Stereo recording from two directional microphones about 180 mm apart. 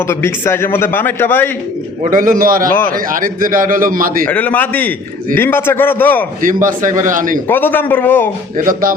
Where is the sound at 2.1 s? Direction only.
50° right (ahead or behind).